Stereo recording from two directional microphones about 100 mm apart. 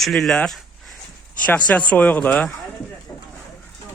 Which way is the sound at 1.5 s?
15° left (ahead or behind).